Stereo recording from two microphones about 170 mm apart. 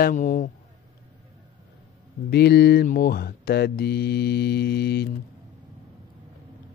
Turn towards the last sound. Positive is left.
turn(degrees=70)  # may be behind; listen again after turning